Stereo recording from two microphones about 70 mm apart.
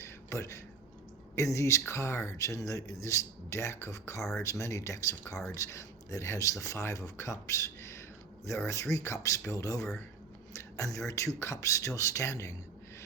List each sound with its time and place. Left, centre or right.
0.0 s a sound: left
1.4 s speech: left
4.2 s speech: centre
4.4 s speech: left